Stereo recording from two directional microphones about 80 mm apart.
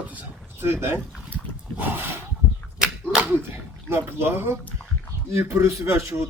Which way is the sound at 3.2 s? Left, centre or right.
Right.